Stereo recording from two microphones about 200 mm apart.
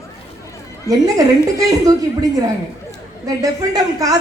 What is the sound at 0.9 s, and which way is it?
A man's voice, 15° right (ahead or behind).